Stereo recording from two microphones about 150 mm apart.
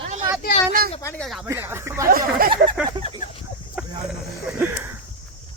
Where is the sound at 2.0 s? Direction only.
75° right (ahead or behind).